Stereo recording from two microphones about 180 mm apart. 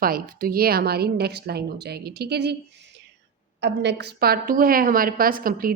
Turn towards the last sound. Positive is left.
turn(degrees=-55)  # may be behind; listen again after turning